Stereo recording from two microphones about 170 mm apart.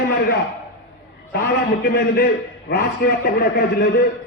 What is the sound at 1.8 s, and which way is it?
A man's voice, 70° left (ahead or behind).